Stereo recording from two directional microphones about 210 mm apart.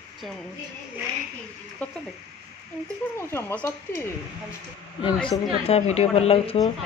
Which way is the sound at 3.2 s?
10° left (ahead or behind).